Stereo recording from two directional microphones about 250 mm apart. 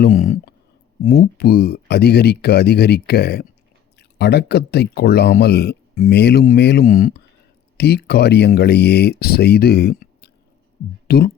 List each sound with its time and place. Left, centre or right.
0.0 s speech: left